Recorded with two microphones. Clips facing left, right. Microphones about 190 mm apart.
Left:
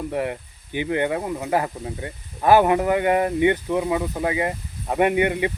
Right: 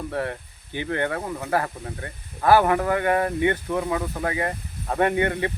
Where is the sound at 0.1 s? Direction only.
15° left (ahead or behind).